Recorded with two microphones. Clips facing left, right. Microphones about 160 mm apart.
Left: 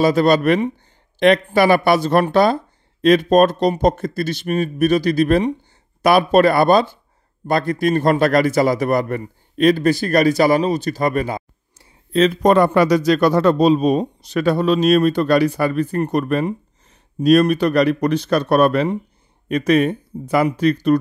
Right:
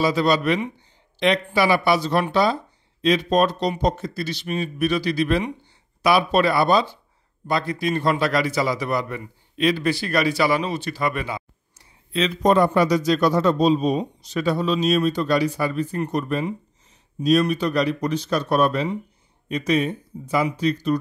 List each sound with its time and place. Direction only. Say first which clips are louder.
0.0 s speech: left 5 dB; 50° left (ahead or behind)